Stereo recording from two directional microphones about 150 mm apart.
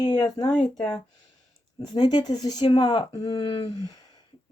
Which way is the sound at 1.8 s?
30° left (ahead or behind).